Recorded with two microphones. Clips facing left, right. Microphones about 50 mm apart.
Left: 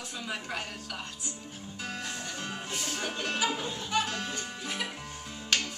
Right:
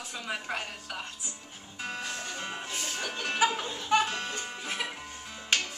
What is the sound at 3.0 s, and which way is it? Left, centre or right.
Music, centre.